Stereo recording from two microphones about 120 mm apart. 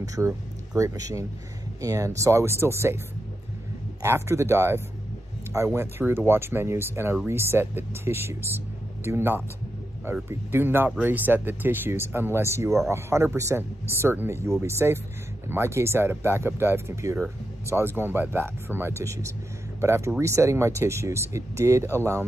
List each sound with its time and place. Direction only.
0.0 s speech: 25° right (ahead or behind)
4.0 s speech: 20° right (ahead or behind)